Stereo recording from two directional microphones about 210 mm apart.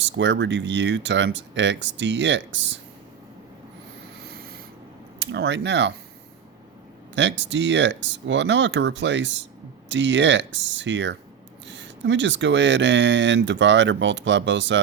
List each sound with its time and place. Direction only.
0.0 s speech: 60° right (ahead or behind)
4.2 s a sound: 50° right (ahead or behind)
5.2 s speech: 55° right (ahead or behind)
7.2 s speech: 60° right (ahead or behind)